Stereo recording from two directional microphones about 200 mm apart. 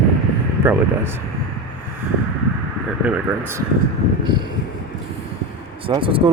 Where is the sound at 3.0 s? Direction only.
5° right (ahead or behind).